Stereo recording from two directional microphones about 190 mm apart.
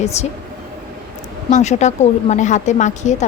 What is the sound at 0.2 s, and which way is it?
Speech, 35° left (ahead or behind).